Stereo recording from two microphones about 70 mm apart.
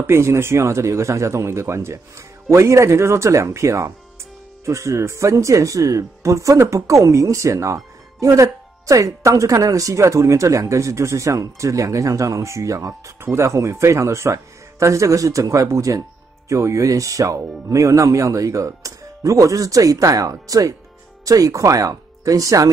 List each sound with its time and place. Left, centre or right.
0.0 s speech: right